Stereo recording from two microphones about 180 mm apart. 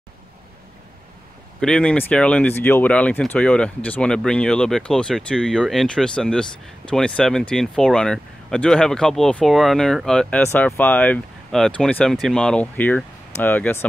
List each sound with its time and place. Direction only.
1.6 s speech: 5° left (ahead or behind)